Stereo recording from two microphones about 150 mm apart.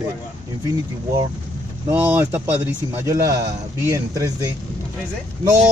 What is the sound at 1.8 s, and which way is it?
A man's voice, 15° right (ahead or behind).